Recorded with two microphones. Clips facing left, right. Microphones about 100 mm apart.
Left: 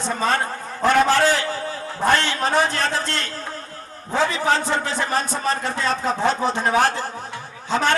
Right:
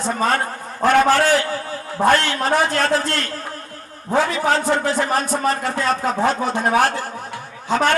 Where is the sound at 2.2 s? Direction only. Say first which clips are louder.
Right 1 dB; 25° left (ahead or behind).